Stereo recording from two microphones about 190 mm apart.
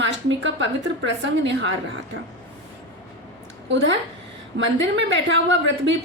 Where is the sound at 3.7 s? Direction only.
70° right (ahead or behind).